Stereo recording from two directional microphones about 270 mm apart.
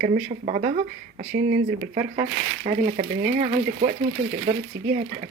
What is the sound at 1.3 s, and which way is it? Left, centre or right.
Speech, right.